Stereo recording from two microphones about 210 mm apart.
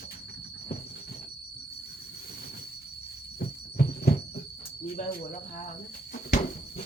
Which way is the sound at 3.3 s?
45° left (ahead or behind).